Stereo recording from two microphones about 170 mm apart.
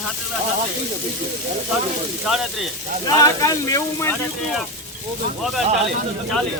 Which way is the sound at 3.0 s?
20° left (ahead or behind).